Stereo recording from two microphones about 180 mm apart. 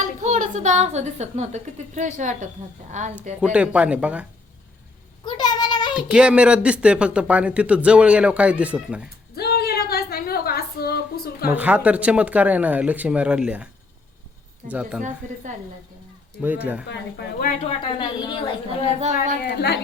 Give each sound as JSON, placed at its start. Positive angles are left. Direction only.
{"t": 0.2, "sound": "a woman's voice", "side_deg": -40}
{"t": 3.4, "sound": "speech", "side_deg": -5}
{"t": 5.2, "sound": "a sound", "side_deg": 25}
{"t": 5.9, "sound": "speech", "side_deg": -5}
{"t": 9.0, "sound": "a sound", "side_deg": 60}
{"t": 11.4, "sound": "speech", "side_deg": -10}
{"t": 14.7, "sound": "speech", "side_deg": -5}
{"t": 15.2, "sound": "a woman's voice", "side_deg": -45}
{"t": 16.4, "sound": "speech", "side_deg": -10}
{"t": 16.8, "sound": "speech", "side_deg": 70}
{"t": 17.7, "sound": "a woman's voice", "side_deg": 25}
{"t": 18.9, "sound": "a woman's voice", "side_deg": -40}
{"t": 19.4, "sound": "a woman's voice", "side_deg": 65}